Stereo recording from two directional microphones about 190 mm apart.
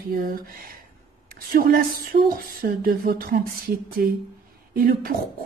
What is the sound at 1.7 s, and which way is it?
A woman's voice, 50° right (ahead or behind).